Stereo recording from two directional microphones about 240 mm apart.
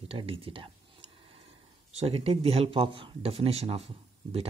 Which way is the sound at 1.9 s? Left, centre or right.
Right.